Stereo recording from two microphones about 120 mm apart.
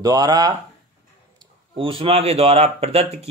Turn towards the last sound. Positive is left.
turn(degrees=-60)  # may be behind; listen again after turning